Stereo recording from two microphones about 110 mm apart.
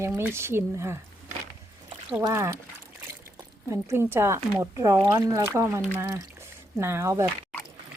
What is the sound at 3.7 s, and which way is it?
Speech, 25° right (ahead or behind).